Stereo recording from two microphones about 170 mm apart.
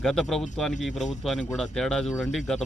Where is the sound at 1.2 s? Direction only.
Centre (ahead or behind).